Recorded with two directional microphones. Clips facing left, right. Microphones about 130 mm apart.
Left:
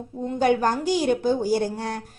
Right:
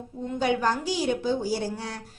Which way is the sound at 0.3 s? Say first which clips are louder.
Left 4 dB; 50° left (ahead or behind).